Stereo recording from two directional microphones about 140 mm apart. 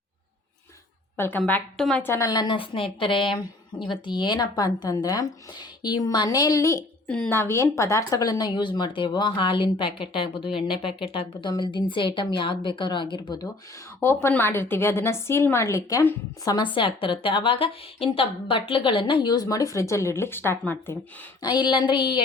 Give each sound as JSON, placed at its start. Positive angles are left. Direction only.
{"t": 1.1, "sound": "a woman's voice", "side_deg": 15}
{"t": 2.0, "sound": "a woman's voice", "side_deg": 20}
{"t": 14.0, "sound": "a woman's voice", "side_deg": 20}
{"t": 21.4, "sound": "speech", "side_deg": 30}